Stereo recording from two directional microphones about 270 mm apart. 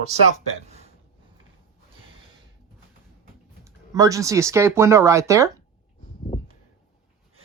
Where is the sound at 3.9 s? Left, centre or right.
Centre.